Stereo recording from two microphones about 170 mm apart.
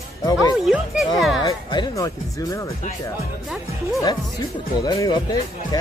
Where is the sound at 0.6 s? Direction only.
Centre (ahead or behind).